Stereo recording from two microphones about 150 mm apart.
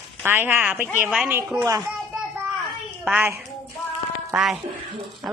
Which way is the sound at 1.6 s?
25° right (ahead or behind).